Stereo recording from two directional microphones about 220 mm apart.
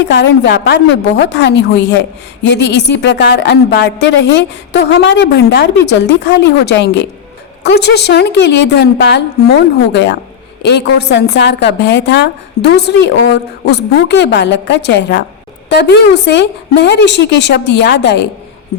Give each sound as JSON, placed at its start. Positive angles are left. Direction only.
{"t": 0.1, "sound": "a woman's voice", "side_deg": 50}